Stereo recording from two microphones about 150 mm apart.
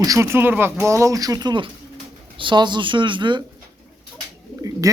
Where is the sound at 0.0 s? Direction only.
20° right (ahead or behind).